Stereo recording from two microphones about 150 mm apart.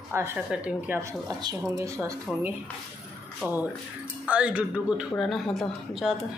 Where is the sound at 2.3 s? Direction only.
Centre (ahead or behind).